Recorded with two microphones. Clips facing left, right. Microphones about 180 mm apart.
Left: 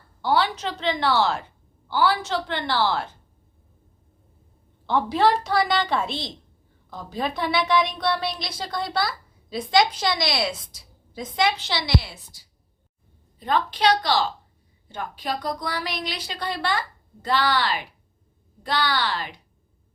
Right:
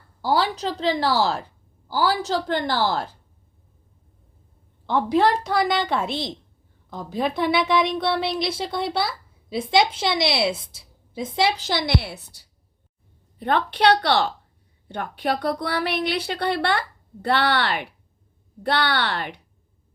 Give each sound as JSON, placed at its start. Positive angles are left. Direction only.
{"t": 0.2, "sound": "a woman's voice", "side_deg": -35}
{"t": 4.9, "sound": "a woman's voice", "side_deg": 0}
{"t": 7.5, "sound": "a woman's voice", "side_deg": -25}